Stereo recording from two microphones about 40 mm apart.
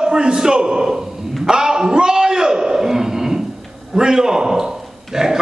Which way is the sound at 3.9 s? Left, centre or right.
Centre.